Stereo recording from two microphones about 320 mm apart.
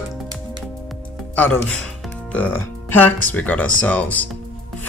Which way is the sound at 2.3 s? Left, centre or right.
Centre.